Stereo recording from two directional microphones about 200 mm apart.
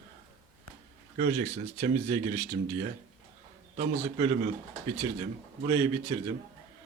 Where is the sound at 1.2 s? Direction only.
35° right (ahead or behind).